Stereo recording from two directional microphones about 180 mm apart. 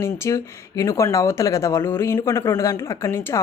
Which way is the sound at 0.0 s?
15° left (ahead or behind).